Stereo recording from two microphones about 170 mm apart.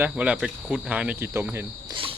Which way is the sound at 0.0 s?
5° right (ahead or behind).